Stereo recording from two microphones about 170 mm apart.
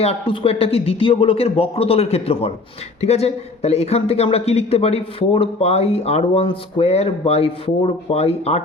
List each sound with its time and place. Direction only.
0.0 s speech: 35° left (ahead or behind)